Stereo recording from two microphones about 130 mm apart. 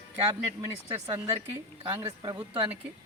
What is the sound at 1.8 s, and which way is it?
Speech, 35° right (ahead or behind).